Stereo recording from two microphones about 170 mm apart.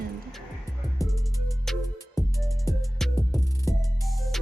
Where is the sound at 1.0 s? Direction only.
Centre (ahead or behind).